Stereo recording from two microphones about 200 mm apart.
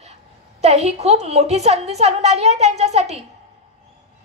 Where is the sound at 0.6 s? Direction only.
30° right (ahead or behind).